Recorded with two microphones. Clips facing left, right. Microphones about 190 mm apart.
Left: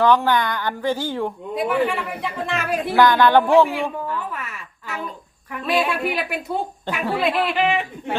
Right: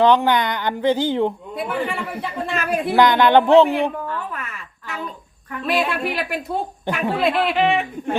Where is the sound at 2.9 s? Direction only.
20° right (ahead or behind).